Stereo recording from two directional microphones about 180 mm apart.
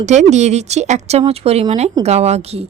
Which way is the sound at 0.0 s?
40° right (ahead or behind).